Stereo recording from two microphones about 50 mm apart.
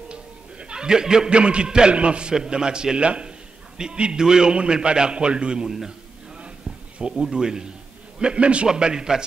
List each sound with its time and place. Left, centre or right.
0.1 s a man's voice: centre
5.7 s a man's voice: centre
7.0 s a man's voice: centre